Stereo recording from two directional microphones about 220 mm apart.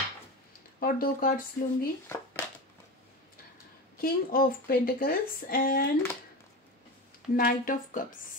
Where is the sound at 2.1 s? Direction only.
10° left (ahead or behind).